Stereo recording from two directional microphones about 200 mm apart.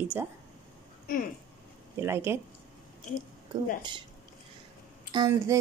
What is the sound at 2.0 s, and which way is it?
Speech, 10° right (ahead or behind).